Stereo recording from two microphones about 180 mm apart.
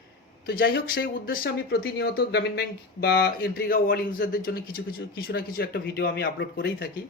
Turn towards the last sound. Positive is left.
turn(degrees=70)  # may be behind; listen again after turning